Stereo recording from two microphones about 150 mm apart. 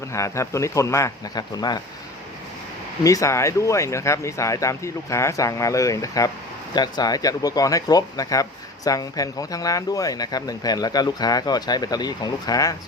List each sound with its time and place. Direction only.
0.1 s speech: 20° left (ahead or behind)
3.0 s speech: 20° left (ahead or behind)